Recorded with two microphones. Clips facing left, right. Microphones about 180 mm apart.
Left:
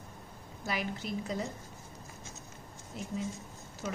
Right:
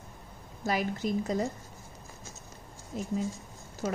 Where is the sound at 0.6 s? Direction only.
40° right (ahead or behind).